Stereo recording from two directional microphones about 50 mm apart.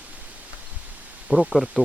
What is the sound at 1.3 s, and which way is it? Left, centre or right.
Speech, centre.